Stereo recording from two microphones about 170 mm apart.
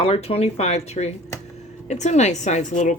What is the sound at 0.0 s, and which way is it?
A woman's voice, 35° left (ahead or behind).